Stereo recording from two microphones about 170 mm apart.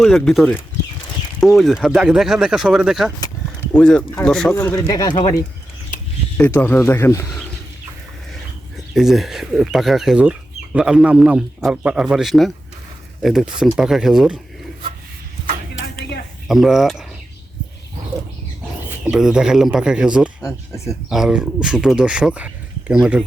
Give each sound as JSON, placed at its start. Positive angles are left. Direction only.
{"t": 0.0, "sound": "speech", "side_deg": 0}
{"t": 4.5, "sound": "speech", "side_deg": 15}
{"t": 5.9, "sound": "a sound", "side_deg": 50}
{"t": 6.3, "sound": "speech", "side_deg": 10}
{"t": 9.0, "sound": "speech", "side_deg": 0}
{"t": 16.5, "sound": "speech", "side_deg": 0}
{"t": 19.0, "sound": "speech", "side_deg": -5}
{"t": 20.4, "sound": "speech", "side_deg": 15}
{"t": 21.1, "sound": "speech", "side_deg": -5}